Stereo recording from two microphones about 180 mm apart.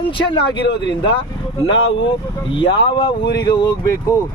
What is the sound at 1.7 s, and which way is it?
Speech, 90° left.